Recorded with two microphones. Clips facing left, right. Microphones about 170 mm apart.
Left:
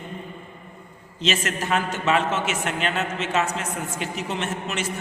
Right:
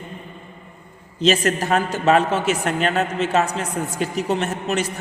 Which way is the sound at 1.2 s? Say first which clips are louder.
Right 7 dB; 35° right (ahead or behind).